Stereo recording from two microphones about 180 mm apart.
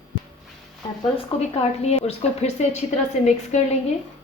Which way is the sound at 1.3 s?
30° left (ahead or behind).